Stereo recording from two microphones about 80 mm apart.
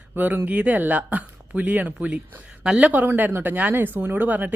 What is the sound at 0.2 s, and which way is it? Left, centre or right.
Speech, right.